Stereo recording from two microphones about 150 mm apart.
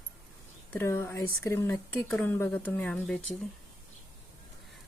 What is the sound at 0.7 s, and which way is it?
Speech, 15° left (ahead or behind).